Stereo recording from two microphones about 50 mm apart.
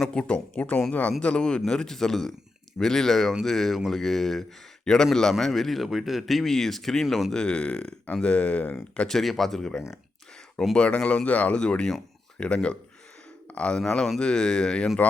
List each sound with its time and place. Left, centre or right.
0.0 s speech: centre
7.3 s speech: centre
9.0 s speech: centre
10.8 s speech: left
13.8 s speech: centre